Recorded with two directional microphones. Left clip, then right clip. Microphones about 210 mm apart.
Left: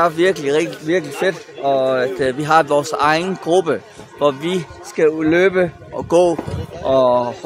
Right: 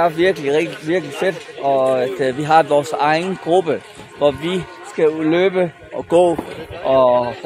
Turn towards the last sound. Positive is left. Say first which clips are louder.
# right 1 dB
turn(degrees=15)  # may be behind; listen again after turning